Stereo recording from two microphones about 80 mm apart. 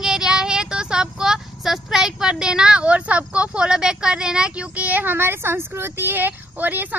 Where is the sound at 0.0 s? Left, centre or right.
Centre.